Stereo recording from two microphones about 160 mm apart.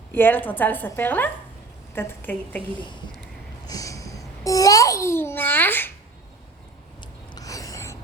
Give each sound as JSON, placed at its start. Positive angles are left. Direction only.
{"t": 0.1, "sound": "a woman's voice", "side_deg": 10}
{"t": 3.7, "sound": "a child's voice", "side_deg": 20}
{"t": 7.3, "sound": "a sound", "side_deg": 20}